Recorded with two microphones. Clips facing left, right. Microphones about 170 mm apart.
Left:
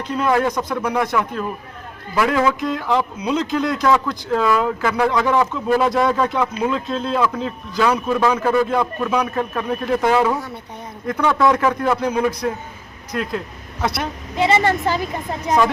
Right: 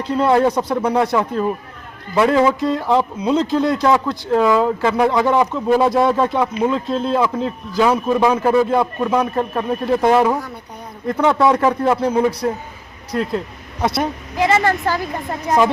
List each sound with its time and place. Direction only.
0.0 s speech: 25° right (ahead or behind)
14.4 s a woman's voice: 15° left (ahead or behind)